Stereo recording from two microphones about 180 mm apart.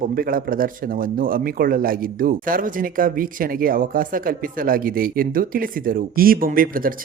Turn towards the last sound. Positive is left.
turn(degrees=-50)  # may be behind; listen again after turning